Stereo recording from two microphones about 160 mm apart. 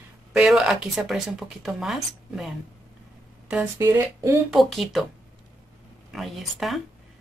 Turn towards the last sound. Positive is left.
turn(degrees=0)  # may be behind; listen again after turning